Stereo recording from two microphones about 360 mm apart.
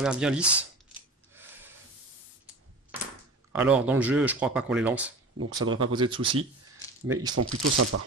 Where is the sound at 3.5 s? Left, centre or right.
Centre.